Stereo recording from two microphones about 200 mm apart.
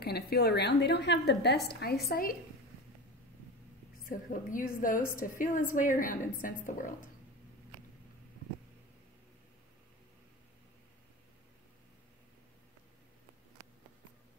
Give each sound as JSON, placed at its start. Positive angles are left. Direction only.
{"t": 0.0, "sound": "a woman's voice", "side_deg": 55}
{"t": 4.0, "sound": "a woman's voice", "side_deg": 45}